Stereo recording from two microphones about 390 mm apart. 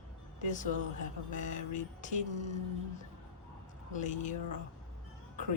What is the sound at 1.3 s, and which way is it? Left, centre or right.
Speech, centre.